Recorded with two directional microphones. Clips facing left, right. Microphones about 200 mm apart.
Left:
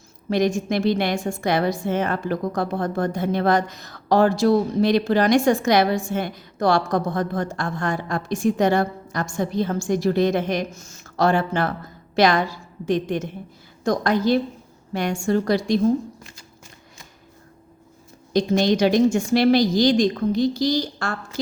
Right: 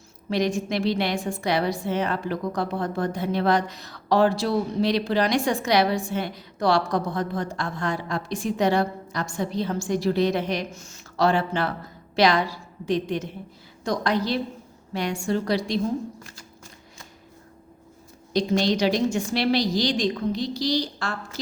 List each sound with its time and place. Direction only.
0.3 s a woman's voice: 50° left (ahead or behind)
18.3 s a woman's voice: 50° left (ahead or behind)